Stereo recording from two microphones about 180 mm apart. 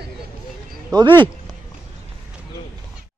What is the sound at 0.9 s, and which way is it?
Speech, 25° right (ahead or behind).